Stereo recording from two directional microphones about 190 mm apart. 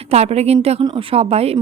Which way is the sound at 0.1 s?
35° right (ahead or behind).